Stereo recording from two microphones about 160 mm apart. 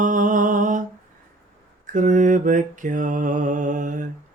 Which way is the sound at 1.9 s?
50° right (ahead or behind).